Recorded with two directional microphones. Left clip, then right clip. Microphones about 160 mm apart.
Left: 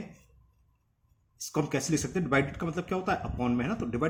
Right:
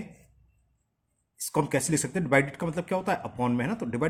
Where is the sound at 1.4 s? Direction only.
45° right (ahead or behind).